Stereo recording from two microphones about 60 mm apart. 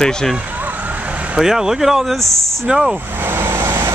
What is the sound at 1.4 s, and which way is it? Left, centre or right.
Speech, centre.